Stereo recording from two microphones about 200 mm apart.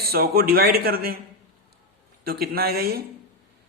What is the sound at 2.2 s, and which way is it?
Speech, 50° right (ahead or behind).